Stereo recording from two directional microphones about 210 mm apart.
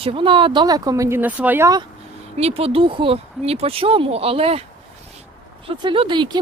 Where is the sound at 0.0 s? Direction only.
25° right (ahead or behind).